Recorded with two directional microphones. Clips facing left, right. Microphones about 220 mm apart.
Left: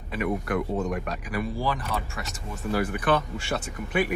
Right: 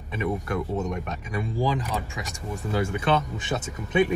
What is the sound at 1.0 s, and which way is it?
Speech, 25° right (ahead or behind).